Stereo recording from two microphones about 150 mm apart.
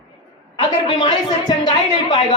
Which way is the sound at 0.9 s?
35° left (ahead or behind).